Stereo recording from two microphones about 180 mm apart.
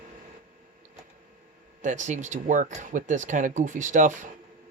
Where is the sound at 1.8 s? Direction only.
45° right (ahead or behind).